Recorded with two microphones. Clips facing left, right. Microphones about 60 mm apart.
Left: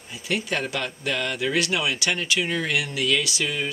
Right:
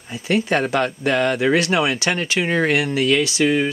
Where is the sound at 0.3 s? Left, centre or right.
Right.